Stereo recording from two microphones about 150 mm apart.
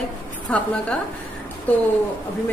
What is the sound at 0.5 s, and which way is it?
Speech, 10° left (ahead or behind).